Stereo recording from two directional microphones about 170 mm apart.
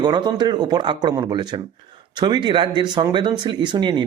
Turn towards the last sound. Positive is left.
turn(degrees=-25)  # may be behind; listen again after turning